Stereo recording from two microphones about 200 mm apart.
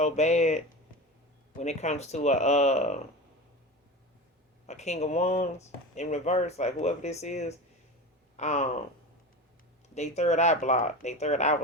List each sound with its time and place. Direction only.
0.0 s speech: 35° left (ahead or behind)
4.6 s speech: 35° left (ahead or behind)
9.9 s speech: 35° left (ahead or behind)